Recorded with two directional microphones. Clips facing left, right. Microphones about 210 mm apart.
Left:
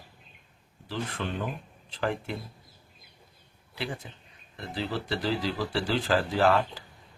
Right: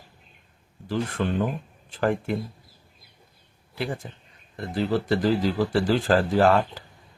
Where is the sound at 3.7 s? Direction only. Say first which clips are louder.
Right 5 dB; 45° right (ahead or behind).